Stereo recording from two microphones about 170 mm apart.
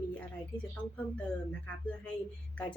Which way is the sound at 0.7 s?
5° left (ahead or behind).